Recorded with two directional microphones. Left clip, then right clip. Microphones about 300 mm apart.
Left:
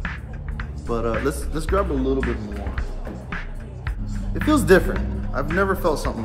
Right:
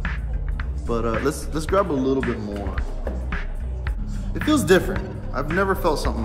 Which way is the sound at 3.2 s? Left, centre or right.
Centre.